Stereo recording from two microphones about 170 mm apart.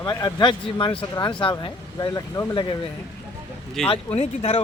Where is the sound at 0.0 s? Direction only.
20° left (ahead or behind).